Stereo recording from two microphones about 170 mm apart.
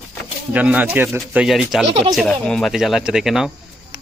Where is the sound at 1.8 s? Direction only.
35° right (ahead or behind).